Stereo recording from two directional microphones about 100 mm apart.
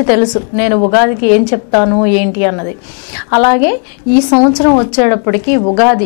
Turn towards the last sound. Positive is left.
turn(degrees=15)  # may be behind; listen again after turning